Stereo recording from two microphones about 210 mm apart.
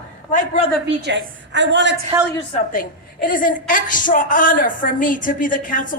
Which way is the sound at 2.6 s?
40° left (ahead or behind).